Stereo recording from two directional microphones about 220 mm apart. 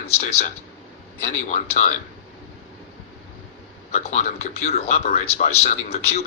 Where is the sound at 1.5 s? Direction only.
35° left (ahead or behind).